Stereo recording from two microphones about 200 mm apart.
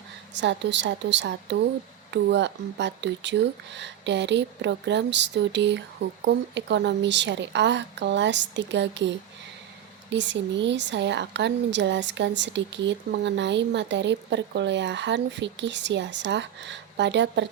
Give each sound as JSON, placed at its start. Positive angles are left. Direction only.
{"t": 0.3, "sound": "a woman's voice", "side_deg": -60}